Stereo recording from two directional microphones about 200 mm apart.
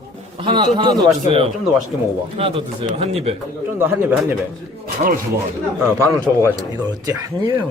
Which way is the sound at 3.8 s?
10° right (ahead or behind).